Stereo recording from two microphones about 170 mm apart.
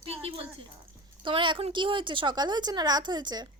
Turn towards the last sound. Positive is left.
turn(degrees=-25)  # may be behind; listen again after turning